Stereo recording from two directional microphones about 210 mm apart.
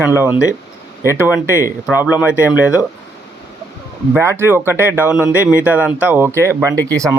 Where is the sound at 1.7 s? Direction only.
5° right (ahead or behind).